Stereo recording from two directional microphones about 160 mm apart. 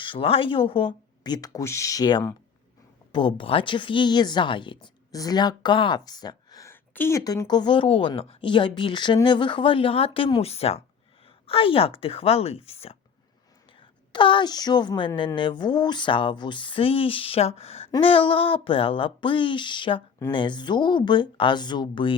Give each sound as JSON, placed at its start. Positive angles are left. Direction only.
{"t": 0.0, "sound": "a woman's voice", "side_deg": 35}